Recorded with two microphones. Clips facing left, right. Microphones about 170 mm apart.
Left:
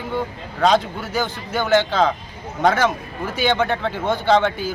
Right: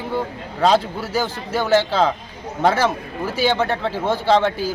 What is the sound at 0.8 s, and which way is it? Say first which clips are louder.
Speech: right 1 dB; 35° right (ahead or behind).